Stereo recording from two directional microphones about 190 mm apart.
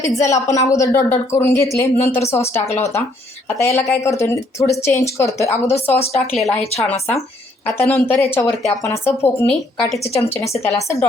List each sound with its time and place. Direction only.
0.2 s speech: 15° left (ahead or behind)
3.6 s speech: 15° left (ahead or behind)
6.1 s speech: centre (ahead or behind)
7.8 s speech: 10° left (ahead or behind)
10.0 s a woman's voice: 30° left (ahead or behind)
10.2 s speech: 15° left (ahead or behind)